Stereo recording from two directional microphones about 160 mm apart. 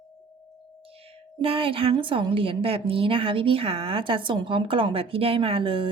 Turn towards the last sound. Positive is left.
turn(degrees=-35)  # may be behind; listen again after turning